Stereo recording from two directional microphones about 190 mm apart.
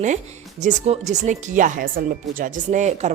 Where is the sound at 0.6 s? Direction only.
35° right (ahead or behind).